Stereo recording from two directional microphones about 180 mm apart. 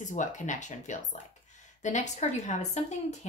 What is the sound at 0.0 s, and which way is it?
A woman's voice, 45° left (ahead or behind).